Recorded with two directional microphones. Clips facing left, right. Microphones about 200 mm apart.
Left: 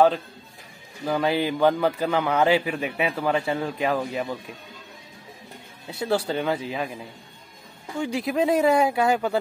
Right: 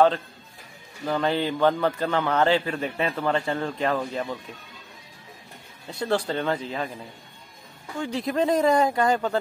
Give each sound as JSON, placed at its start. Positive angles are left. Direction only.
{"t": 1.0, "sound": "a man's voice", "side_deg": 10}
{"t": 5.9, "sound": "a man's voice", "side_deg": 10}
{"t": 8.0, "sound": "a man's voice", "side_deg": 10}